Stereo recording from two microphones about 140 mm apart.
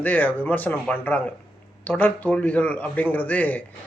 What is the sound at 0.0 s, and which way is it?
Speech, 10° left (ahead or behind).